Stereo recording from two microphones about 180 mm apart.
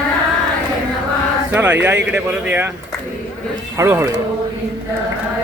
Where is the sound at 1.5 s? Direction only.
10° right (ahead or behind).